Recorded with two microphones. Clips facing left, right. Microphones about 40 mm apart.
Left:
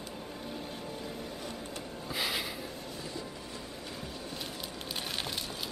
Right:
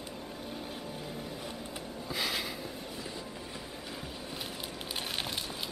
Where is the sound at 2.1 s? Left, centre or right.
Centre.